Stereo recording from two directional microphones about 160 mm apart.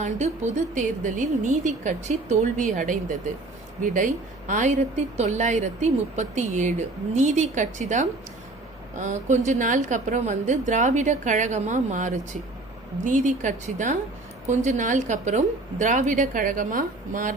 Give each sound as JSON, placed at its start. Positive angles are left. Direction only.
{"t": 0.0, "sound": "a woman's voice", "side_deg": -50}